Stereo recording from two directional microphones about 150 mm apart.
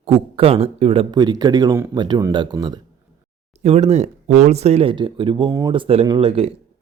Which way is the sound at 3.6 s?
45° right (ahead or behind).